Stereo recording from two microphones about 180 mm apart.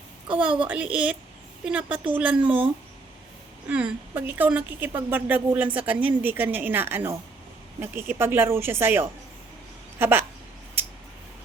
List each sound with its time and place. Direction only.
0.6 s a woman's voice: 10° right (ahead or behind)
2.4 s speech: 30° right (ahead or behind)
3.7 s a woman's voice: 10° right (ahead or behind)